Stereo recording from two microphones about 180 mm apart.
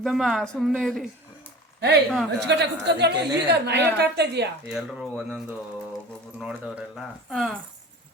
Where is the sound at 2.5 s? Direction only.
70° right (ahead or behind).